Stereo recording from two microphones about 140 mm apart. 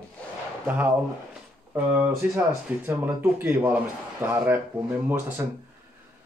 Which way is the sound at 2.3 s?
15° right (ahead or behind).